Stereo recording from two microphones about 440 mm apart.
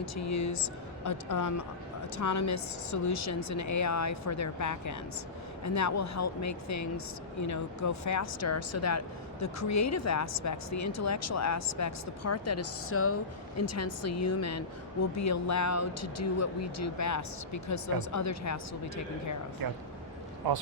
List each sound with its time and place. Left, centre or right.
0.0 s speech: left
19.6 s speech: right